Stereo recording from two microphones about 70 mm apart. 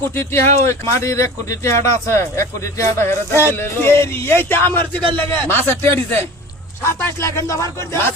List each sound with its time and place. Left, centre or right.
0.1 s speech: left